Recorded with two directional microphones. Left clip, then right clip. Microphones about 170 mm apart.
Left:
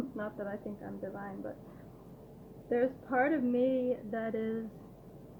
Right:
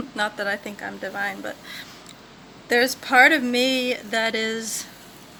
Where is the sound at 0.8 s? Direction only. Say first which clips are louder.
Right 14 dB; 35° right (ahead or behind).